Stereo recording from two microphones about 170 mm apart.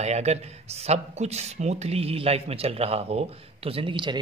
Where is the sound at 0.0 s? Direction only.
40° right (ahead or behind).